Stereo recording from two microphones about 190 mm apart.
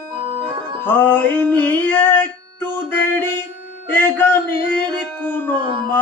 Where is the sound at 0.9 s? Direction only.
10° left (ahead or behind).